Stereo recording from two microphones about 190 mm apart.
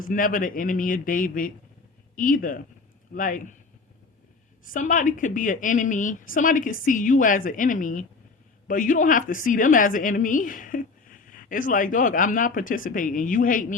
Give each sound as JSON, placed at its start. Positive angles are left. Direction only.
{"t": 0.0, "sound": "a woman's voice", "side_deg": 45}
{"t": 4.6, "sound": "a woman's voice", "side_deg": 45}